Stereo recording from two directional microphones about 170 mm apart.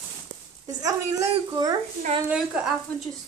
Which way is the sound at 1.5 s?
20° right (ahead or behind).